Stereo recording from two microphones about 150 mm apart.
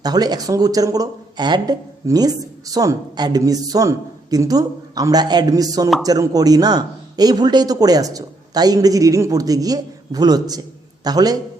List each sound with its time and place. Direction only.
0.0 s speech: 25° right (ahead or behind)